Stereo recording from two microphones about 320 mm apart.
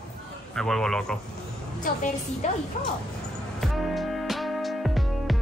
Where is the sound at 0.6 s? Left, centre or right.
Centre.